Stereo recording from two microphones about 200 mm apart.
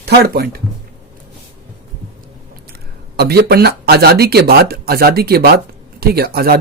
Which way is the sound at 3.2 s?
55° right (ahead or behind).